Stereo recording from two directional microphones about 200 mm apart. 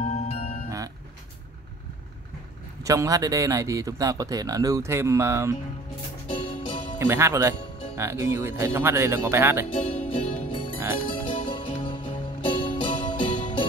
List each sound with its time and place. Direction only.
0.0 s music: 35° left (ahead or behind)
0.7 s vehicle: 15° right (ahead or behind)
2.8 s a man's voice: 15° right (ahead or behind)
7.0 s a man's voice: 10° right (ahead or behind)
9.9 s music: 25° left (ahead or behind)